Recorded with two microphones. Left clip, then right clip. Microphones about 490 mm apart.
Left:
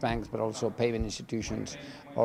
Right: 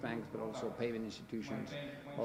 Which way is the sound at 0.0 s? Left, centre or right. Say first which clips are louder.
Left 11 dB; left.